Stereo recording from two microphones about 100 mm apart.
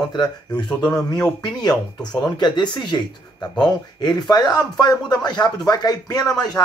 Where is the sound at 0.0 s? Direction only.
45° left (ahead or behind).